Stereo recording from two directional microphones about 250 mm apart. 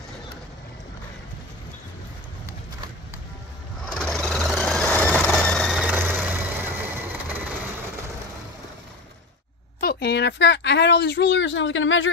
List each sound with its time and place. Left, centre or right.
3.8 s vehicle: centre
9.8 s a woman's voice: left